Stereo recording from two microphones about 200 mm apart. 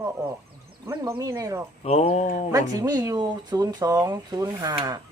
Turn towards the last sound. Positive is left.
turn(degrees=-20)  # may be behind; listen again after turning